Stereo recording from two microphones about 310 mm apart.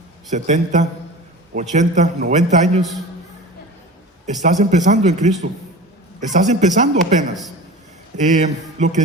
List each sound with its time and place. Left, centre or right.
0.3 s a man's voice: right
4.4 s a man's voice: right
8.1 s a man's voice: right